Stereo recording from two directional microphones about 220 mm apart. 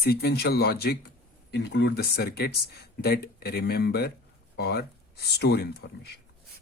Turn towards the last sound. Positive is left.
turn(degrees=45)  # may be behind; listen again after turning